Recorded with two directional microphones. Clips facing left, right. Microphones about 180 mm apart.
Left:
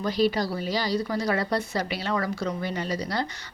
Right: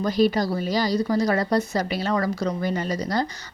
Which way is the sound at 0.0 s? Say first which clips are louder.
Right 3 dB; 45° right (ahead or behind).